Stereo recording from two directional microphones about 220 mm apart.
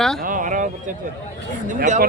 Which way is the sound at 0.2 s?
40° right (ahead or behind).